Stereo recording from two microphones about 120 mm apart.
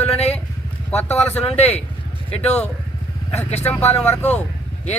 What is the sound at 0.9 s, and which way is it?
Speech, 15° left (ahead or behind).